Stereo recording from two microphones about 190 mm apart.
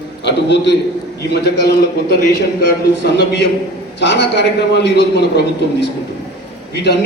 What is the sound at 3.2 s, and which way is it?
A man's voice, 60° left (ahead or behind).